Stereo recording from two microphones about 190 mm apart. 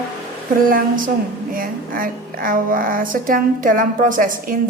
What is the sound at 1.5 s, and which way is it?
A woman's voice, 50° right (ahead or behind).